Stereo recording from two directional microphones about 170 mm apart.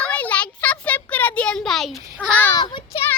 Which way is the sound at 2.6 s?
30° left (ahead or behind).